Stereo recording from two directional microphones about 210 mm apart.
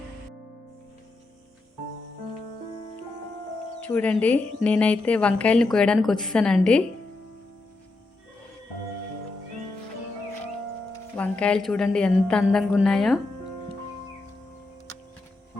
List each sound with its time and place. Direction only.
3.8 s speech: 5° left (ahead or behind)
11.2 s speech: 5° left (ahead or behind)